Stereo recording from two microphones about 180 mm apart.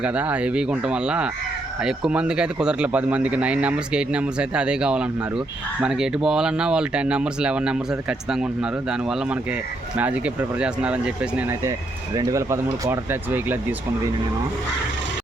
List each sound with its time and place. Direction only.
0.0 s speech: 5° right (ahead or behind)
8.9 s speech: 5° right (ahead or behind)